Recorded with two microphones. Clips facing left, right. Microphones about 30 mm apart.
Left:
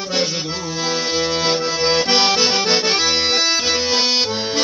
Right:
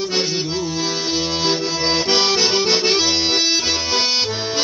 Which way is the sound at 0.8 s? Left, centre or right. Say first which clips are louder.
Left 2 dB; left.